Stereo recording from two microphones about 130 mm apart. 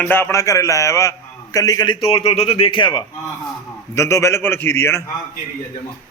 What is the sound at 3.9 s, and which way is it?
A man's voice, 20° left (ahead or behind).